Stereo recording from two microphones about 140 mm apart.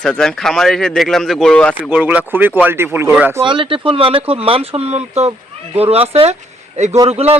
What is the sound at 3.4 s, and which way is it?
A man's voice, 35° right (ahead or behind).